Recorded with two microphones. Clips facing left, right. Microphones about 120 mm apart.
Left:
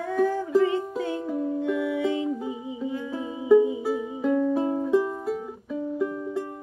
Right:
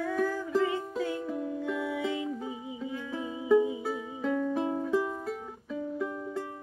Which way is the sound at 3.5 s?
15° left (ahead or behind).